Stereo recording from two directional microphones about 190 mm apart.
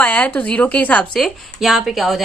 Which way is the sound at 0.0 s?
10° left (ahead or behind).